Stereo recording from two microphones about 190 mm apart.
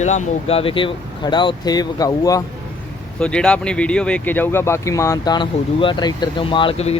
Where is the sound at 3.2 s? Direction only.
5° left (ahead or behind).